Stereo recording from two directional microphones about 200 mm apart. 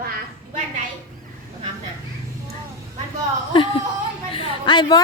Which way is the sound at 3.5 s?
25° left (ahead or behind).